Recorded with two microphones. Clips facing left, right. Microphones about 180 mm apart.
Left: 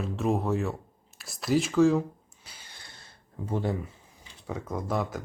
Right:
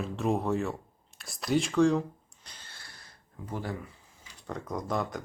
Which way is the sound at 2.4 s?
10° left (ahead or behind).